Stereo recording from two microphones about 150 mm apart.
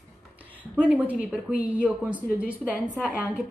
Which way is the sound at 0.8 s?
10° right (ahead or behind).